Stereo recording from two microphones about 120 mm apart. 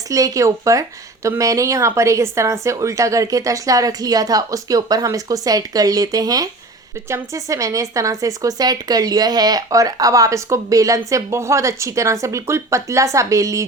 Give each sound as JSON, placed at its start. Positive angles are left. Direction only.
{"t": 0.1, "sound": "speech", "side_deg": -30}